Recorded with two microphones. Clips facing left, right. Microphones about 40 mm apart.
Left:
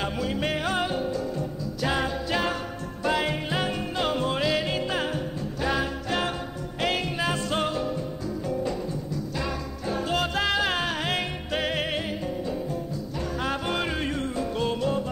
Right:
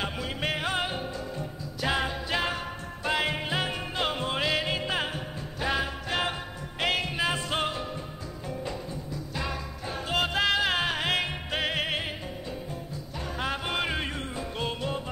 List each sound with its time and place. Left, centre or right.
0.0 s music: centre